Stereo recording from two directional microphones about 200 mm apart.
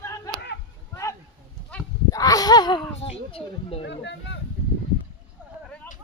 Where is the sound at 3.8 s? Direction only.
65° left (ahead or behind).